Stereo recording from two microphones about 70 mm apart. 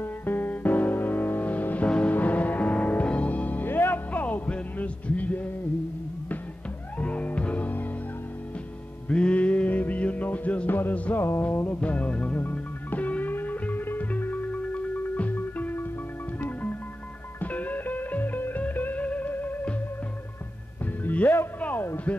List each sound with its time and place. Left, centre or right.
0.0 s music: left
7.0 s music: left
9.1 s music: centre
20.8 s music: left